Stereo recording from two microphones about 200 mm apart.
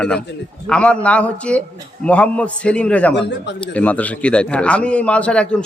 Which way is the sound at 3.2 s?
60° left (ahead or behind).